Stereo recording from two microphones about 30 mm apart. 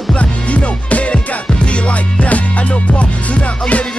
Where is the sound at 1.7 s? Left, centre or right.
Left.